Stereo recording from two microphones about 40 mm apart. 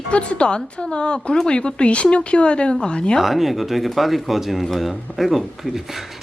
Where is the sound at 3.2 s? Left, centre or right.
Centre.